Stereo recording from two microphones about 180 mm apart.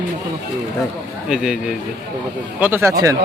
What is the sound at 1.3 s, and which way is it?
A man's voice, 5° right (ahead or behind).